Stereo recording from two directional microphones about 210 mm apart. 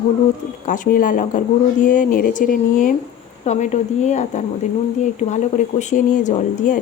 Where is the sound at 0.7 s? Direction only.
40° left (ahead or behind).